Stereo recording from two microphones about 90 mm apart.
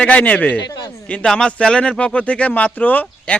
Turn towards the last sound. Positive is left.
turn(degrees=15)  # may be behind; listen again after turning